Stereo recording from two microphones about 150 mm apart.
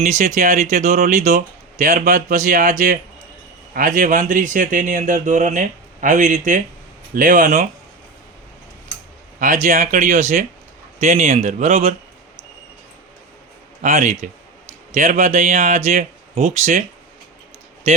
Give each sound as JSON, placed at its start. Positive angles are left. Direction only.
{"t": 0.0, "sound": "speech", "side_deg": -55}
{"t": 9.4, "sound": "speech", "side_deg": -55}
{"t": 13.8, "sound": "speech", "side_deg": -55}
{"t": 14.7, "sound": "a sound", "side_deg": -55}
{"t": 15.1, "sound": "speech", "side_deg": -55}